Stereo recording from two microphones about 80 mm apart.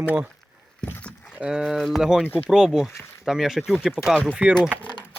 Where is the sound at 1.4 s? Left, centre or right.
Centre.